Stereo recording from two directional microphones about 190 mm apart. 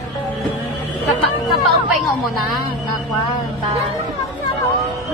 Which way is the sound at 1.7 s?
Centre (ahead or behind).